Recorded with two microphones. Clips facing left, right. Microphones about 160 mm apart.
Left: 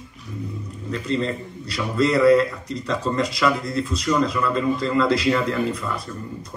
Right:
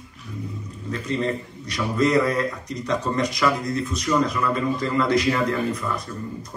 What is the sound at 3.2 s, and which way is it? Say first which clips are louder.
A man's voice: left 1 dB; 30° left (ahead or behind).